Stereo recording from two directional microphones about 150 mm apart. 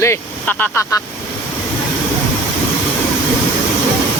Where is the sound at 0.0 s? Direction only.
15° left (ahead or behind).